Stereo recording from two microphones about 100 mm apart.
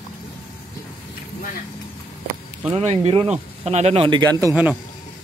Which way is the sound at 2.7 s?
85° right.